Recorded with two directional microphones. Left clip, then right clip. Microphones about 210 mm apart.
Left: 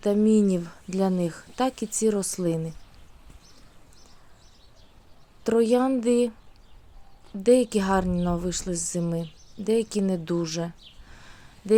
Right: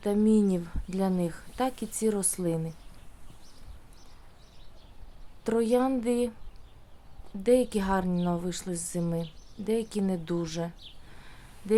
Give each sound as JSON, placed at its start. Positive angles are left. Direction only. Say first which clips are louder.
{"t": 0.0, "sound": "speech", "louder": "left 4 dB", "side_deg": 15}
{"t": 5.4, "sound": "speech", "louder": "left 4 dB", "side_deg": 15}
{"t": 7.4, "sound": "speech", "louder": "left 4 dB", "side_deg": 15}